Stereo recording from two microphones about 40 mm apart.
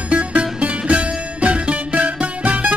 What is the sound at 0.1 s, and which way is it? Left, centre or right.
Music, right.